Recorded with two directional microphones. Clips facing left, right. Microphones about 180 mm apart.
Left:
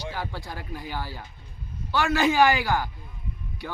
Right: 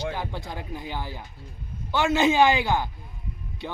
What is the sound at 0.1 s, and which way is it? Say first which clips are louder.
Speech: right 2 dB; 20° right (ahead or behind).